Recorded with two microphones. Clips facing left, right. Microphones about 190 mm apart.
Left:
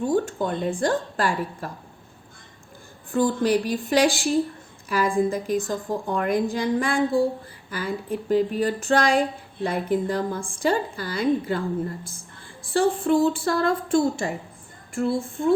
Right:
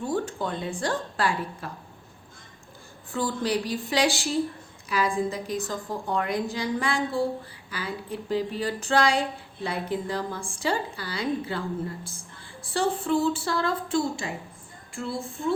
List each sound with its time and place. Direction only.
0.1 s speech: 50° left (ahead or behind)
3.1 s speech: 50° left (ahead or behind)
12.7 s speech: 55° left (ahead or behind)